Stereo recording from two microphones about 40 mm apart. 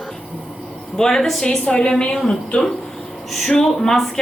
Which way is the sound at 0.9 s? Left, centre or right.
Centre.